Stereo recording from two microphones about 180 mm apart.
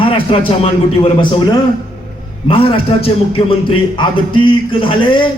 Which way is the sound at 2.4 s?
30° left (ahead or behind).